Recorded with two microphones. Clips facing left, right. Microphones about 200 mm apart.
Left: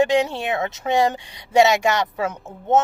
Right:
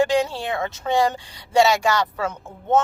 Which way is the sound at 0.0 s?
20° left (ahead or behind).